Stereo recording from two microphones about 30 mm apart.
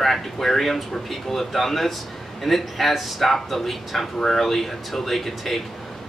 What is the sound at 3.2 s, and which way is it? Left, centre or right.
A man's voice, centre.